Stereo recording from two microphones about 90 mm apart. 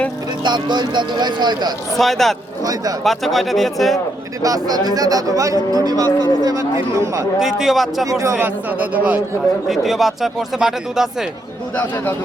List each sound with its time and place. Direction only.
0.4 s speech: 55° right (ahead or behind)
2.0 s speech: centre (ahead or behind)
4.4 s speech: 45° right (ahead or behind)
7.3 s speech: 5° right (ahead or behind)
8.4 s a man's voice: 15° right (ahead or behind)
9.6 s speech: centre (ahead or behind)